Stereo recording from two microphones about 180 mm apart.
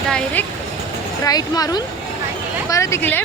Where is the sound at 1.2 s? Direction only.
20° left (ahead or behind).